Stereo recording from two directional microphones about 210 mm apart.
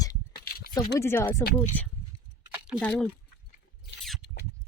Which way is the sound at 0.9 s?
10° left (ahead or behind).